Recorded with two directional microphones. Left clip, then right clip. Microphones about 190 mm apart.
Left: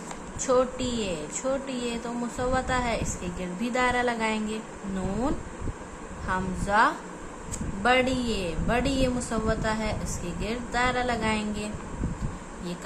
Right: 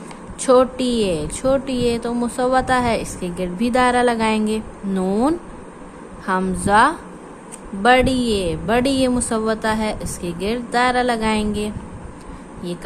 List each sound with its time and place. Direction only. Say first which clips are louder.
0.4 s a woman's voice: right 10 dB; 40° right (ahead or behind)